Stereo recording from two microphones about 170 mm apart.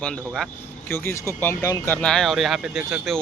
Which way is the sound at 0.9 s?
15° left (ahead or behind).